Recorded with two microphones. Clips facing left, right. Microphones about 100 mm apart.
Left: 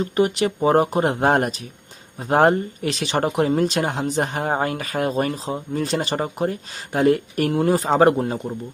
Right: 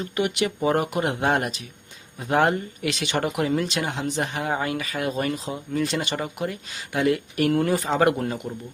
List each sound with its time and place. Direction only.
0.0 s speech: 35° left (ahead or behind)